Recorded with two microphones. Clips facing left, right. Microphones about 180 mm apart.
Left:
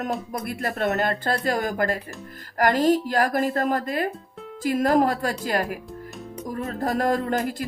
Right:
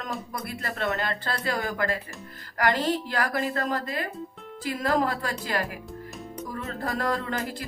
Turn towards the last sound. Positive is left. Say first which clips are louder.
# left 6 dB
turn(degrees=45)  # may be behind; listen again after turning